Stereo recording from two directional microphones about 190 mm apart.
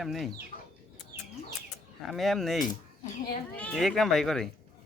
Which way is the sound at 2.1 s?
Centre (ahead or behind).